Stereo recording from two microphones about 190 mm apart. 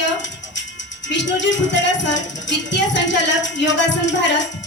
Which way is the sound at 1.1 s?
70° left (ahead or behind).